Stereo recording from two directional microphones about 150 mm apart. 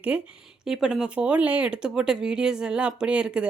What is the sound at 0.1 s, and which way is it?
Speech, 10° right (ahead or behind).